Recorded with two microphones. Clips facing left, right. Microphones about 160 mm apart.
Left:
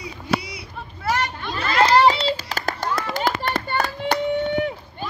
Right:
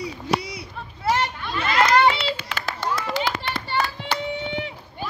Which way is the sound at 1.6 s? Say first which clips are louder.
Left 2 dB; 30° left (ahead or behind).